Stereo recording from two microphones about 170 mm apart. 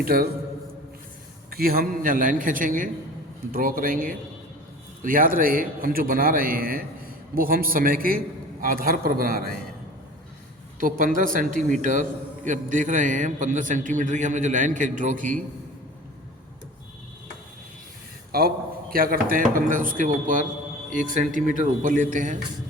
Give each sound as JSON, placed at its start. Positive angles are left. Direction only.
{"t": 0.0, "sound": "a man's voice", "side_deg": -60}
{"t": 1.5, "sound": "a man's voice", "side_deg": -60}
{"t": 10.8, "sound": "a man's voice", "side_deg": -55}
{"t": 18.3, "sound": "a man's voice", "side_deg": -60}